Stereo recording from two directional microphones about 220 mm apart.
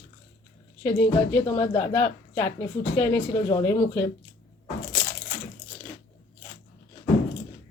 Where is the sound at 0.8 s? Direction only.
10° left (ahead or behind).